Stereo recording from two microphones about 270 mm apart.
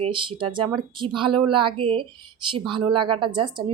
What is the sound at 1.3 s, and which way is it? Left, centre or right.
Speech, right.